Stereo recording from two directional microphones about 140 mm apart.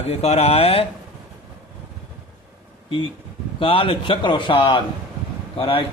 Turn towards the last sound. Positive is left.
turn(degrees=40)  # may be behind; listen again after turning